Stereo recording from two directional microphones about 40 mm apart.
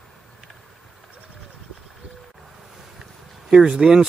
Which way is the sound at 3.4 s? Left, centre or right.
Centre.